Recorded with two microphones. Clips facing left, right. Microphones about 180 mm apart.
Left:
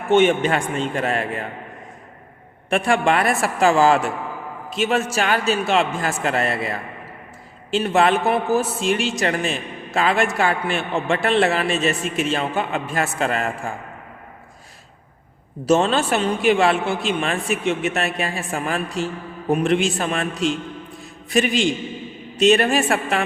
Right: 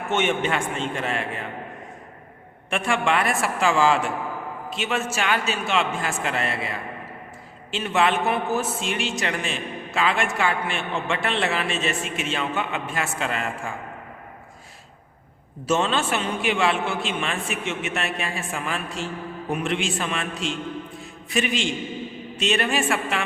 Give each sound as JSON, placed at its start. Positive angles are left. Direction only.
{"t": 0.1, "sound": "a man's voice", "side_deg": 35}
{"t": 2.6, "sound": "a man's voice", "side_deg": 40}
{"t": 15.6, "sound": "a man's voice", "side_deg": 40}
{"t": 21.0, "sound": "a sound", "side_deg": 40}
{"t": 22.4, "sound": "a man's voice", "side_deg": 40}